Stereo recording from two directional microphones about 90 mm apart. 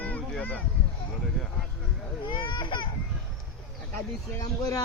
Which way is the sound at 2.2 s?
65° left (ahead or behind).